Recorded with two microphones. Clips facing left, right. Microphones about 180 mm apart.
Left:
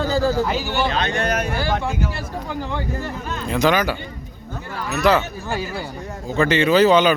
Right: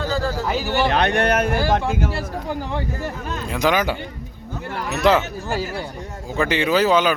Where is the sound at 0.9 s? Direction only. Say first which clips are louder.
Right 3 dB; 65° right (ahead or behind).